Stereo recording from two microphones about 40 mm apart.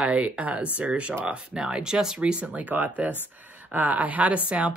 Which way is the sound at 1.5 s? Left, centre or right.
Centre.